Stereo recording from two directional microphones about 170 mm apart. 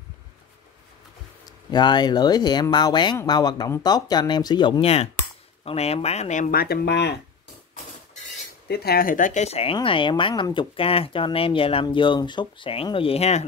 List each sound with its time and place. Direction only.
1.7 s speech: 25° left (ahead or behind); by 6.5 s 45° left (ahead or behind)
6.5 s speech: 65° left (ahead or behind)
8.6 s speech: 70° left (ahead or behind); by 13.4 s 35° left (ahead or behind)